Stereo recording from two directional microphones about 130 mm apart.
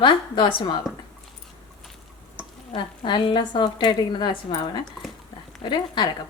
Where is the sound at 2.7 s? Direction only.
40° left (ahead or behind).